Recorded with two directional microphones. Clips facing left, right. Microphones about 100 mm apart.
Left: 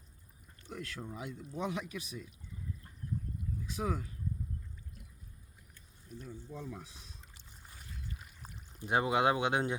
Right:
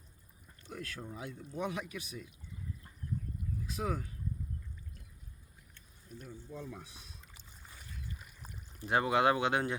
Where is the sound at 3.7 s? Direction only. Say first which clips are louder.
Left 1 dB; 25° left (ahead or behind).